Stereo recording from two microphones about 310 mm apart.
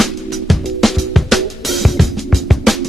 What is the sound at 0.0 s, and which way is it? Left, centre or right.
Music, centre.